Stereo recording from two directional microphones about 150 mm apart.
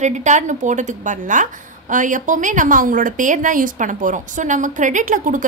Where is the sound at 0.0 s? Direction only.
55° right (ahead or behind).